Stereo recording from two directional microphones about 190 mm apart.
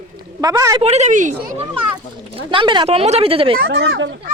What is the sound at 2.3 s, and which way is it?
Speech, 25° right (ahead or behind).